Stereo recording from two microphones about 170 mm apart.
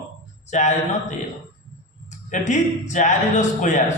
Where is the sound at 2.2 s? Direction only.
45° left (ahead or behind).